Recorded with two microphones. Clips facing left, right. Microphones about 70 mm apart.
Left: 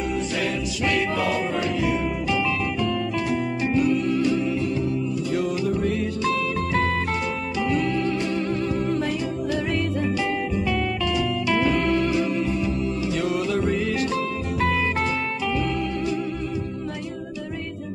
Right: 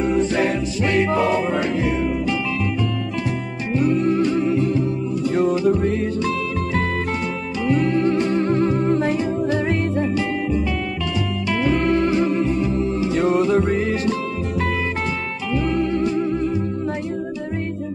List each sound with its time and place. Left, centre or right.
0.0 s music: right
3.8 s music: right
7.7 s music: right
11.7 s music: right
15.6 s music: right